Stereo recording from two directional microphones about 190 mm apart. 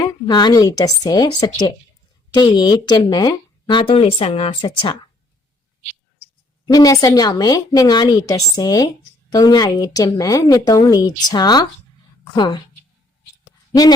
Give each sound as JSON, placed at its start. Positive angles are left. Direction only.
{"t": 0.0, "sound": "speech", "side_deg": 20}
{"t": 2.3, "sound": "speech", "side_deg": 20}
{"t": 6.7, "sound": "speech", "side_deg": 20}
{"t": 13.4, "sound": "a sound", "side_deg": 20}